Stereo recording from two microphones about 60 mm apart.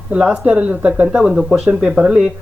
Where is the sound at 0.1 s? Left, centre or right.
Centre.